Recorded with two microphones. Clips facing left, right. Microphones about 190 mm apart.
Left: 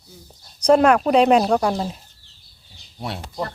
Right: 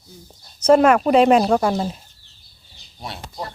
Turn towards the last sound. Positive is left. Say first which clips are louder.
# left 4 dB
turn(degrees=65)  # may be behind; listen again after turning